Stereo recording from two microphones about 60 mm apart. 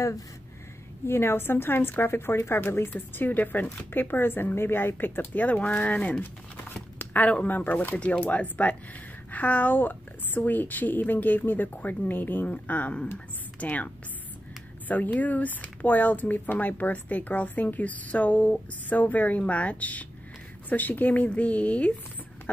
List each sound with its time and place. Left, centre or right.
1.0 s a woman's voice: left
14.9 s speech: left